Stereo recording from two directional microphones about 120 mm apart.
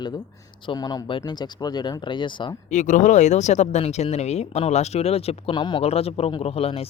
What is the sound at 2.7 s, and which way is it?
Speech, 90° left.